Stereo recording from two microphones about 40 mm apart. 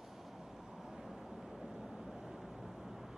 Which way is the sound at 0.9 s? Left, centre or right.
Centre.